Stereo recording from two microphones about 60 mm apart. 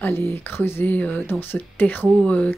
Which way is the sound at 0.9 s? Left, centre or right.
Left.